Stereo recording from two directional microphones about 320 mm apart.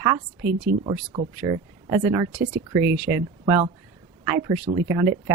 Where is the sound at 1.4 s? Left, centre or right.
Centre.